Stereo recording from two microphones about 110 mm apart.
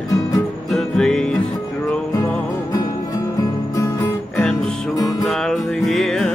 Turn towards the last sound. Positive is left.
turn(degrees=5)  # may be behind; listen again after turning